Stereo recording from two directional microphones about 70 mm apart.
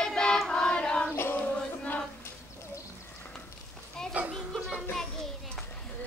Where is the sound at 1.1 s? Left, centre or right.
Left.